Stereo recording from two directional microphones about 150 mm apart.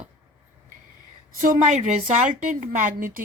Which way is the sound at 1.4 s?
55° right (ahead or behind).